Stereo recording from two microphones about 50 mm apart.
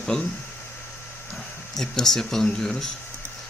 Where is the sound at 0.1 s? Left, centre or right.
Centre.